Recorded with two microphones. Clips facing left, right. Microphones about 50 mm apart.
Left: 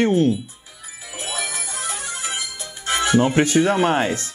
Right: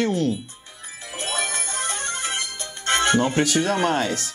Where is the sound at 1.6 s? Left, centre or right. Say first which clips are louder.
Right 1 dB; right.